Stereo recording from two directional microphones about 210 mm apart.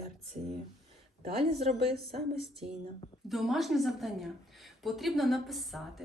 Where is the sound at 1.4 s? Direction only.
30° right (ahead or behind).